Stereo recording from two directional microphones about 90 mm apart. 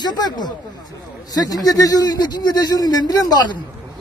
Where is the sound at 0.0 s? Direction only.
50° left (ahead or behind).